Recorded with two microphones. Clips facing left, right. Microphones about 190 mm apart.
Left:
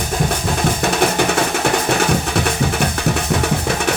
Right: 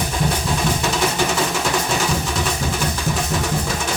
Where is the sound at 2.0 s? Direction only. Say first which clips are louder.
Left 4 dB; 65° left (ahead or behind).